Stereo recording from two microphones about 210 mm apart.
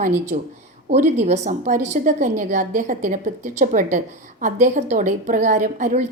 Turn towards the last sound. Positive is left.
turn(degrees=-35)  # may be behind; listen again after turning